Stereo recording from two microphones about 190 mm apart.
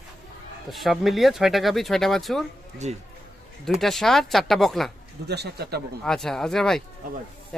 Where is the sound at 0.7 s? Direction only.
Centre (ahead or behind).